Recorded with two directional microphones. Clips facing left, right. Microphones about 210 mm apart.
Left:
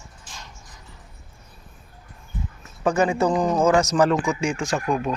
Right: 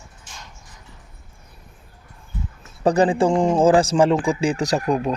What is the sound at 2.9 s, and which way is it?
Speech, 35° right (ahead or behind).